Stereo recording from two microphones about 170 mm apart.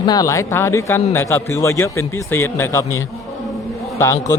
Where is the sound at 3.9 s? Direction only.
15° left (ahead or behind).